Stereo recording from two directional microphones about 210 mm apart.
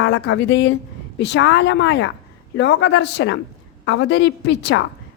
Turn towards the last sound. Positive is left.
turn(degrees=55)  # may be behind; listen again after turning